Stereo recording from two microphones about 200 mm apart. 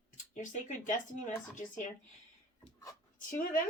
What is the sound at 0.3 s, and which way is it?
Speech, 40° left (ahead or behind).